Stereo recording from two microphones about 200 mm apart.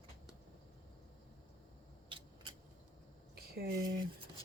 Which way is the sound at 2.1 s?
25° right (ahead or behind).